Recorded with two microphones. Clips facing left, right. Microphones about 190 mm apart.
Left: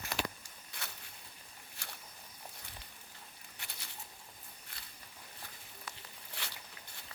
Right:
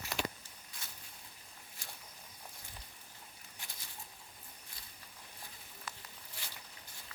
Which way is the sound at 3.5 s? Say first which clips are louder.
Left 1 dB; 65° left (ahead or behind).